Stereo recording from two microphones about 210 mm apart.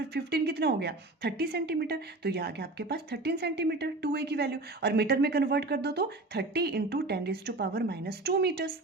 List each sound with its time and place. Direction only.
0.1 s a woman's voice: 50° right (ahead or behind)